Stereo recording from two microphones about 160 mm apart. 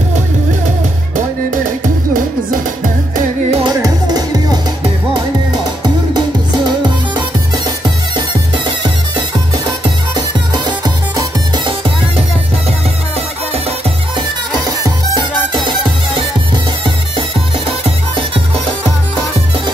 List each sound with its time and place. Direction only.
3.6 s music: 25° right (ahead or behind)
7.2 s music: 25° right (ahead or behind)
10.1 s music: 25° right (ahead or behind)